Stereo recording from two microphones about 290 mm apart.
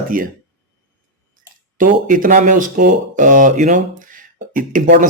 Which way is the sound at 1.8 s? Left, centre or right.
Right.